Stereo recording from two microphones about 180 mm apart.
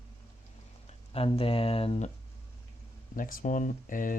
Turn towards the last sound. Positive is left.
turn(degrees=45)  # may be behind; listen again after turning